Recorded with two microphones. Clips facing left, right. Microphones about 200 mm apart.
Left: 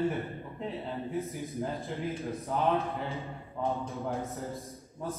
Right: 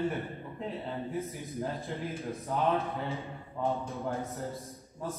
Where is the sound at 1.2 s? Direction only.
Centre (ahead or behind).